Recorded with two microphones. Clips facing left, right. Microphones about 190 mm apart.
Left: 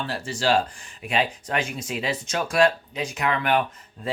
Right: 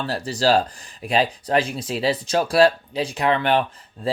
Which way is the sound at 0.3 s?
40° right (ahead or behind).